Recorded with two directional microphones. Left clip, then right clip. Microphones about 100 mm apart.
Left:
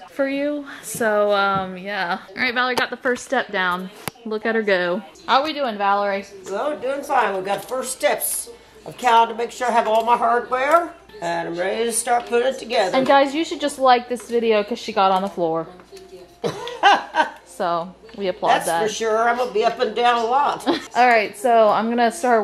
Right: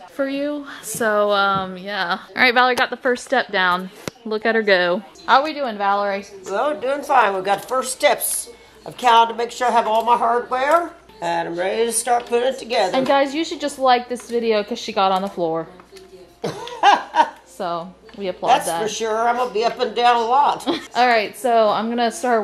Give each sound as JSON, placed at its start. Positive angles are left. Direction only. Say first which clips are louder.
{"t": 0.2, "sound": "a woman's voice", "louder": "left 1 dB", "side_deg": -10}
{"t": 2.5, "sound": "a woman's voice", "louder": "right 4 dB", "side_deg": -25}
{"t": 14.4, "sound": "a woman's voice", "louder": "left 1 dB", "side_deg": -5}
{"t": 15.0, "sound": "a woman's voice", "louder": "left 1 dB", "side_deg": -15}
{"t": 16.3, "sound": "laughter", "louder": "even", "side_deg": -5}
{"t": 17.6, "sound": "speech", "louder": "left 3 dB", "side_deg": 15}
{"t": 18.9, "sound": "a woman's voice", "louder": "right 1 dB", "side_deg": -10}
{"t": 21.6, "sound": "a woman's voice", "louder": "left 2 dB", "side_deg": 15}